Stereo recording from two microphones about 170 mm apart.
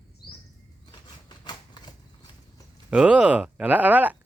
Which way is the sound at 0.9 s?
25° left (ahead or behind).